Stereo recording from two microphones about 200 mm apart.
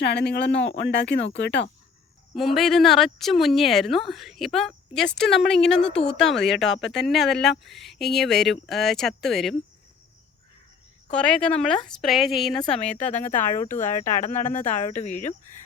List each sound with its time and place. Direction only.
0.0 s speech: 55° left (ahead or behind)
2.3 s speech: centre (ahead or behind)
11.1 s speech: 5° left (ahead or behind)
12.7 s speech: 35° left (ahead or behind)
13.1 s speech: 10° left (ahead or behind)
14.2 s speech: 35° left (ahead or behind)